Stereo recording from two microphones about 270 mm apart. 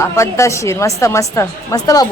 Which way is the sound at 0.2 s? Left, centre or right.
Centre.